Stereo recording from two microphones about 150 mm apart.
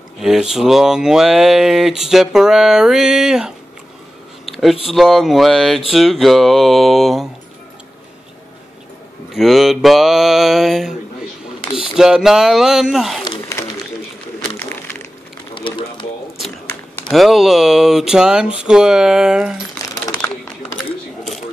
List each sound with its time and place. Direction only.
0.2 s speech: 5° right (ahead or behind)
4.5 s a sound: centre (ahead or behind)
4.8 s speech: centre (ahead or behind)
9.3 s speech: centre (ahead or behind)
15.5 s a sound: 35° left (ahead or behind)
17.1 s speech: centre (ahead or behind)